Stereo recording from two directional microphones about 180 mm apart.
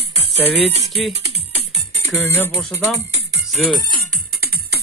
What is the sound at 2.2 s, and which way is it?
Speech, 10° left (ahead or behind).